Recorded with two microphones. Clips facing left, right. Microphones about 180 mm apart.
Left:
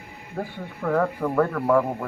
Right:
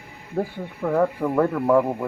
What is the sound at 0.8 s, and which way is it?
Speech, 20° right (ahead or behind).